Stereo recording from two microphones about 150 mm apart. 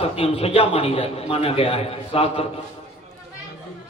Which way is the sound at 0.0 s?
40° left (ahead or behind).